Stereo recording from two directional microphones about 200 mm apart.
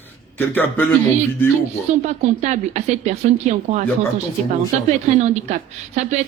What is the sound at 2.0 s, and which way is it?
Speech, 35° right (ahead or behind).